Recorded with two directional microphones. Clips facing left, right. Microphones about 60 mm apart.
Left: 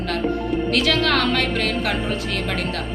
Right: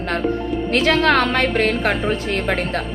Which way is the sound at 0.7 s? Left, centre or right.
Right.